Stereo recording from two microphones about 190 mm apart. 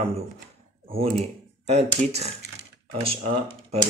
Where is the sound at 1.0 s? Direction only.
35° right (ahead or behind).